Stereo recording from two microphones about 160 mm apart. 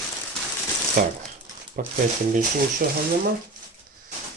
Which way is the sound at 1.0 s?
55° right (ahead or behind).